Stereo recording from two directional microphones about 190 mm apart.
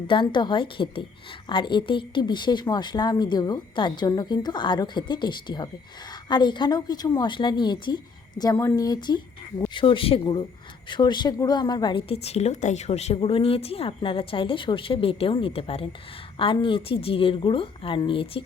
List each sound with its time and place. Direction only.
0.1 s a woman's voice: 25° left (ahead or behind)